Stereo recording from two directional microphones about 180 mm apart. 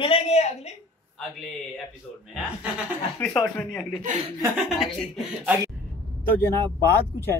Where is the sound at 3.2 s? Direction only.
10° left (ahead or behind).